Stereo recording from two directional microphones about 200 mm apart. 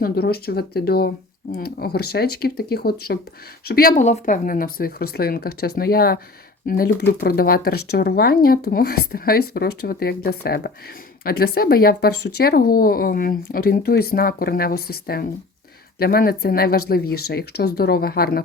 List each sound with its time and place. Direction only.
0.0 s speech: 50° left (ahead or behind)